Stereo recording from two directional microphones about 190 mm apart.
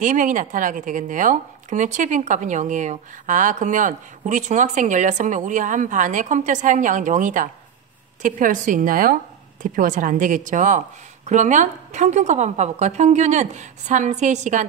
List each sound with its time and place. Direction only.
0.0 s speech: 45° right (ahead or behind)